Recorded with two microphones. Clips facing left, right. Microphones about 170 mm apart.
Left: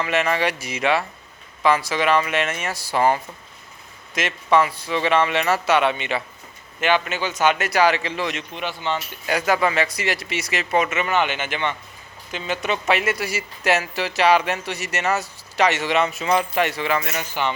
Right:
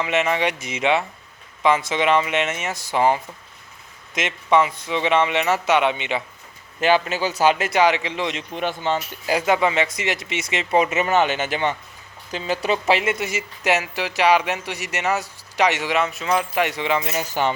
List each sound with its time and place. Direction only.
0.0 s speech: 20° right (ahead or behind)
6.7 s speech: 35° right (ahead or behind); by 8.4 s 20° right (ahead or behind)
8.5 s speech: 45° right (ahead or behind)
9.2 s speech: 25° right (ahead or behind); by 16.5 s centre (ahead or behind)
16.6 s speech: 15° right (ahead or behind)
17.2 s speech: 40° right (ahead or behind)